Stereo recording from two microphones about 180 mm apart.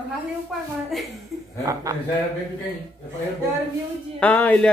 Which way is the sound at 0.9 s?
Centre (ahead or behind).